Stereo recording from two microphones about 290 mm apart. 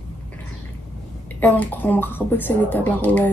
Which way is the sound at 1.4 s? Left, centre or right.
Centre.